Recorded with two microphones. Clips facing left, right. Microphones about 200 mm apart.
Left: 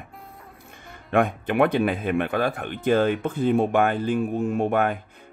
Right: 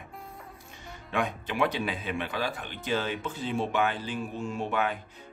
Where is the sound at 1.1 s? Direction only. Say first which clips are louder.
Left 9 dB; 55° left (ahead or behind).